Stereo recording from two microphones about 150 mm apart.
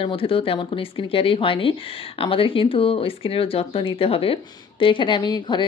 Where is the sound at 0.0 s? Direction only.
35° left (ahead or behind).